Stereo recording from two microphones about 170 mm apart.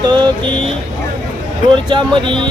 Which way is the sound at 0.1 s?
30° right (ahead or behind).